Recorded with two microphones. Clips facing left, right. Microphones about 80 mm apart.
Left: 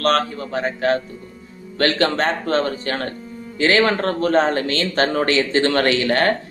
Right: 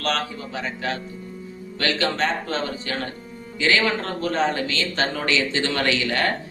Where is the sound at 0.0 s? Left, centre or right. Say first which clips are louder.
Left 7 dB; left.